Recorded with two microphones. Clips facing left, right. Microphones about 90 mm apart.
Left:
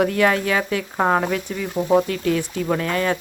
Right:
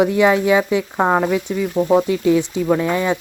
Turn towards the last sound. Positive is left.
turn(degrees=-15)  # may be behind; listen again after turning